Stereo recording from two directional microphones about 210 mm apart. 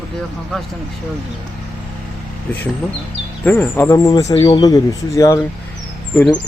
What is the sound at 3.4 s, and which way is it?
Speech, 10° left (ahead or behind).